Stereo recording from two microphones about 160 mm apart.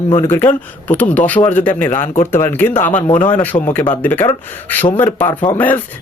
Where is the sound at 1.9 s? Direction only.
50° left (ahead or behind).